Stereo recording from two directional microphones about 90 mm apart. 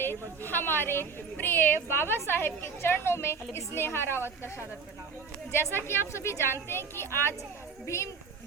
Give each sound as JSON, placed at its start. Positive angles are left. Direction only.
{"t": 0.0, "sound": "a woman's voice", "side_deg": 25}
{"t": 5.5, "sound": "a woman's voice", "side_deg": 25}